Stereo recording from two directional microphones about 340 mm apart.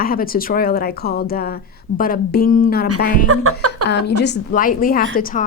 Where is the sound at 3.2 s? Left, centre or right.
Right.